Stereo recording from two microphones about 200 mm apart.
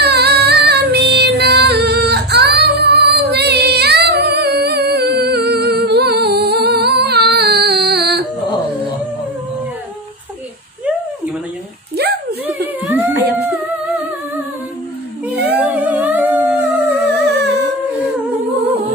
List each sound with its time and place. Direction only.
0.0 s female singing: 55° right (ahead or behind)
15.4 s humming: 10° right (ahead or behind)
17.3 s humming: 55° right (ahead or behind)